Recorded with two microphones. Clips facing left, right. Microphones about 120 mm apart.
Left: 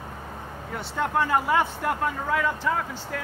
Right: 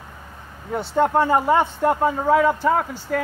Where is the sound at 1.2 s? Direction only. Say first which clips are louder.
Right 5 dB; 30° right (ahead or behind).